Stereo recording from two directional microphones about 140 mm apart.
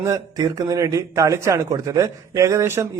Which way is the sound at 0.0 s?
25° right (ahead or behind).